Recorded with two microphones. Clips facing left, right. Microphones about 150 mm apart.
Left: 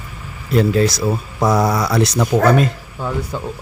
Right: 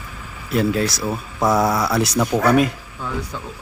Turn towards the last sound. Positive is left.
turn(degrees=30)  # may be behind; listen again after turning